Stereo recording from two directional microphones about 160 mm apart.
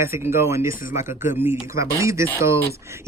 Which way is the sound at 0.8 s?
55° left (ahead or behind).